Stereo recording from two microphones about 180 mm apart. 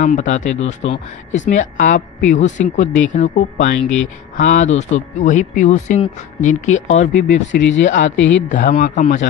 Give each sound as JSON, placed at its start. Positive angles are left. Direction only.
{"t": 0.0, "sound": "speech", "side_deg": 45}
{"t": 7.1, "sound": "speech", "side_deg": 80}
{"t": 8.5, "sound": "speech", "side_deg": 45}